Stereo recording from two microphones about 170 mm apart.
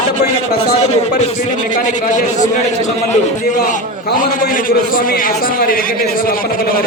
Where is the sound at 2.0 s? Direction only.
45° left (ahead or behind).